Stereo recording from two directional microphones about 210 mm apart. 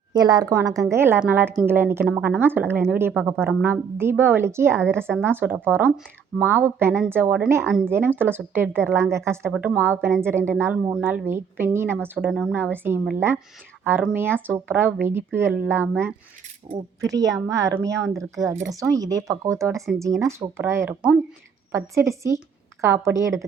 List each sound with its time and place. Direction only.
0.1 s speech: 20° right (ahead or behind)
7.6 s speech: 5° left (ahead or behind)
7.9 s speech: 10° right (ahead or behind)